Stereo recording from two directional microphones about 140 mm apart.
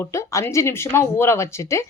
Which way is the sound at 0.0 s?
20° left (ahead or behind).